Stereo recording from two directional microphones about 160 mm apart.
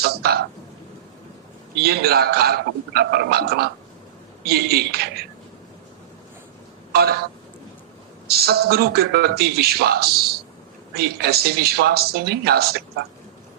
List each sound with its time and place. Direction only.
0.0 s a sound: 75° right (ahead or behind)
1.8 s a man's voice: 80° right
6.9 s a man's voice: 75° right (ahead or behind)
8.3 s a man's voice: 75° right (ahead or behind)